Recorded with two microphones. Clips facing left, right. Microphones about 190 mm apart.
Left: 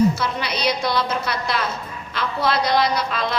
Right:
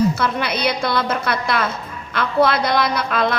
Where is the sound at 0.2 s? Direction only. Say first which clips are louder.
Right 4 dB; 55° right (ahead or behind).